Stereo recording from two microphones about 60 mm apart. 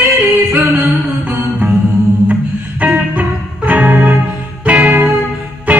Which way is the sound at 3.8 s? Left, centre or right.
Centre.